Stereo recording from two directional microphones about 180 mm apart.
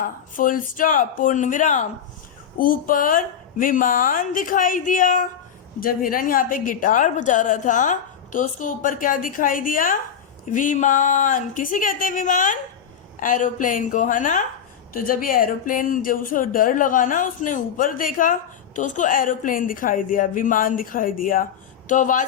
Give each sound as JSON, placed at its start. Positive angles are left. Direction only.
{"t": 0.0, "sound": "speech", "side_deg": 50}